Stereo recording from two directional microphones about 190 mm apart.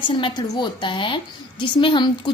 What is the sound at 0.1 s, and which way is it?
A woman's voice, 25° left (ahead or behind).